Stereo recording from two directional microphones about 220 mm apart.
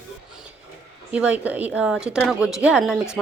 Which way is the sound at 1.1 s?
5° right (ahead or behind).